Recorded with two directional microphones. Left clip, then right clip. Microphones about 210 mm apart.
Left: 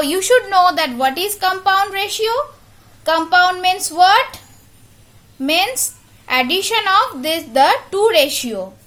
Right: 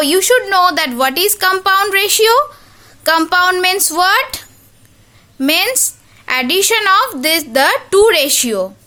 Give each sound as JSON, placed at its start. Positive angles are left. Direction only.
{"t": 0.0, "sound": "a woman's voice", "side_deg": -20}